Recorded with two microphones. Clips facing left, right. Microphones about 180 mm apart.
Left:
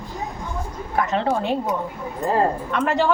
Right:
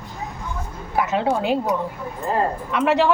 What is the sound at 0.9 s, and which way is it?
Speech, 5° right (ahead or behind).